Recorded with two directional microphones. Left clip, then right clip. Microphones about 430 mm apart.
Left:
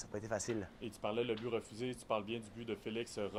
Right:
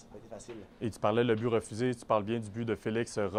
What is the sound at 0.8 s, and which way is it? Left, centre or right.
Speech, right.